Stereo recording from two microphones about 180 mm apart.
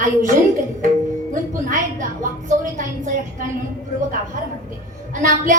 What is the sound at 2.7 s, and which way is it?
Speech, 45° right (ahead or behind).